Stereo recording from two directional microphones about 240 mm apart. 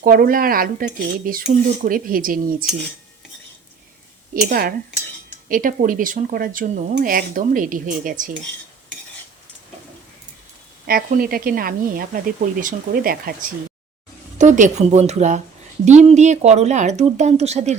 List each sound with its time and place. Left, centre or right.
0.0 s speech: right
4.4 s speech: right
10.8 s speech: right